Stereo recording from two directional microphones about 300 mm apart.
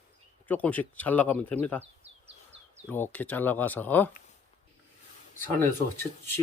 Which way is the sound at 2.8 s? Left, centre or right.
Centre.